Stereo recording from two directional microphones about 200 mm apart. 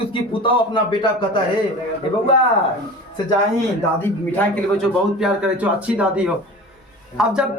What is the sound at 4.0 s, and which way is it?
A man's voice, 10° left (ahead or behind).